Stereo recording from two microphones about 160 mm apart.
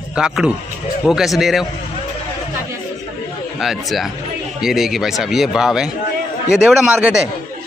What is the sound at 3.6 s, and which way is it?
A man's voice, centre (ahead or behind).